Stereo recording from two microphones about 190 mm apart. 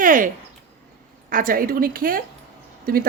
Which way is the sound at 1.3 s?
45° right (ahead or behind).